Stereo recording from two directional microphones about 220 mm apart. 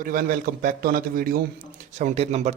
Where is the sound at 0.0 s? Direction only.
40° right (ahead or behind).